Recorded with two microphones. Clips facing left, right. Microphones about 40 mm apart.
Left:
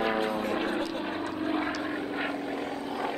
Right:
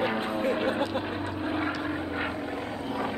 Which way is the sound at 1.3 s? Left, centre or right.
Centre.